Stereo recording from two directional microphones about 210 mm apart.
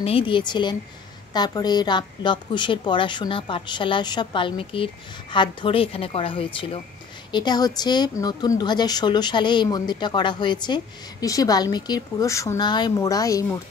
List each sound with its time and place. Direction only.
0.0 s a woman's voice: 25° left (ahead or behind)